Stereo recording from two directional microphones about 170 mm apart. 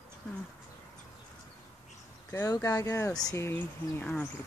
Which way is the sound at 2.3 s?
15° left (ahead or behind).